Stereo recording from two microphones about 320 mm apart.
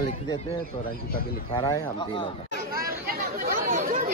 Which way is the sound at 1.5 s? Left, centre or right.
Centre.